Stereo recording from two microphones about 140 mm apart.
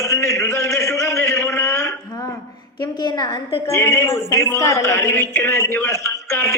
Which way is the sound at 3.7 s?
20° left (ahead or behind).